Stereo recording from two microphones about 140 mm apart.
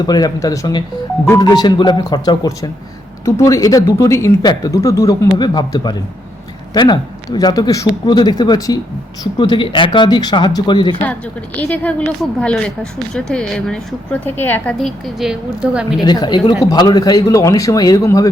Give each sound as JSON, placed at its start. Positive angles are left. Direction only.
{"t": 0.0, "sound": "speech", "side_deg": 30}
{"t": 11.0, "sound": "speech", "side_deg": 10}
{"t": 14.3, "sound": "a woman's voice", "side_deg": 15}
{"t": 16.0, "sound": "speech", "side_deg": 30}